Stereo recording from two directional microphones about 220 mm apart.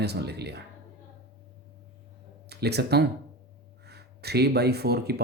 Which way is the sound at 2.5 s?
50° right (ahead or behind).